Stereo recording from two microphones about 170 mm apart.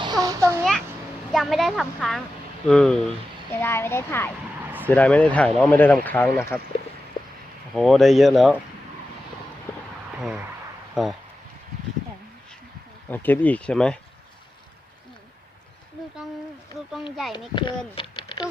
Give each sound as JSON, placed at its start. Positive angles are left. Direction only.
{"t": 0.0, "sound": "a sound", "side_deg": -25}
{"t": 1.3, "sound": "speech", "side_deg": 0}
{"t": 3.6, "sound": "speech", "side_deg": 15}
{"t": 7.7, "sound": "speech", "side_deg": 0}
{"t": 10.2, "sound": "speech", "side_deg": -5}
{"t": 13.1, "sound": "speech", "side_deg": 10}
{"t": 17.5, "sound": "speech", "side_deg": 30}
{"t": 17.9, "sound": "a sound", "side_deg": 30}